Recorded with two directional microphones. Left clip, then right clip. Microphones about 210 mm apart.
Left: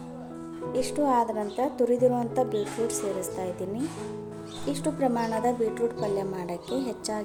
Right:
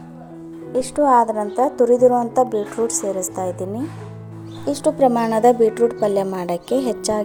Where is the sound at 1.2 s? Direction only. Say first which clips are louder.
Right 9 dB; 10° right (ahead or behind).